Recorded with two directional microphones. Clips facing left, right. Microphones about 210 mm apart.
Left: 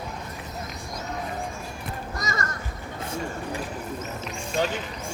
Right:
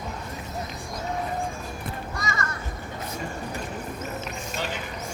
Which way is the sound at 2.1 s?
40° left (ahead or behind).